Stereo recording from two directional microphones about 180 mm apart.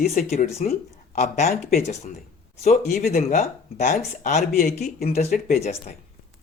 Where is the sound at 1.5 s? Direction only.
55° left (ahead or behind).